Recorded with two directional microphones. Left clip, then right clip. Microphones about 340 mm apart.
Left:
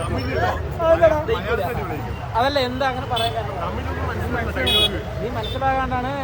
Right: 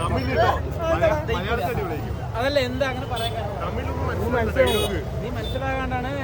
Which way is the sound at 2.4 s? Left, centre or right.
Centre.